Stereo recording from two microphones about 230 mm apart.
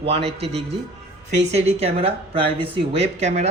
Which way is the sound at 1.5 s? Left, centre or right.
Right.